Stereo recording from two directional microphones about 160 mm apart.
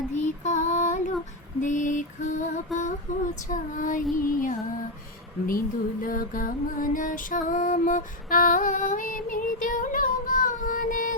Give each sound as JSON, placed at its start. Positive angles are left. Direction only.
{"t": 0.1, "sound": "child singing", "side_deg": 45}
{"t": 1.6, "sound": "mantra", "side_deg": 50}
{"t": 2.7, "sound": "a sound", "side_deg": 0}
{"t": 3.5, "sound": "music", "side_deg": 55}